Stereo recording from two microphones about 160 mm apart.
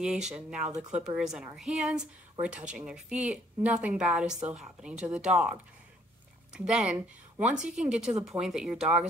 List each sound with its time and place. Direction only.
0.0 s speech: 5° right (ahead or behind)